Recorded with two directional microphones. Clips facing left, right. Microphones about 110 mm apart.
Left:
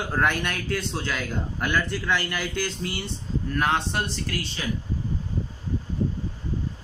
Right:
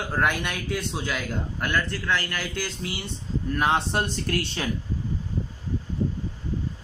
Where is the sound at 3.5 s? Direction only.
20° right (ahead or behind).